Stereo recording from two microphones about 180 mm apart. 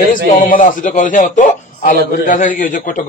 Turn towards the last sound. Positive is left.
turn(degrees=45)  # may be behind; listen again after turning